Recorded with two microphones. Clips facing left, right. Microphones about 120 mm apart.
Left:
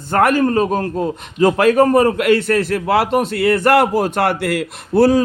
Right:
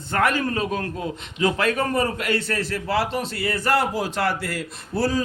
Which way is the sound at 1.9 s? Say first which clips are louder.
Left 10 dB; 60° left (ahead or behind).